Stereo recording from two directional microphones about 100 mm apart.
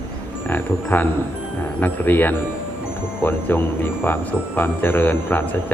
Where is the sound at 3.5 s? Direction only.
20° left (ahead or behind).